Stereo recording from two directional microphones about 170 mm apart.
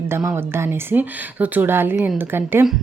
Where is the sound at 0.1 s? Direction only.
10° right (ahead or behind).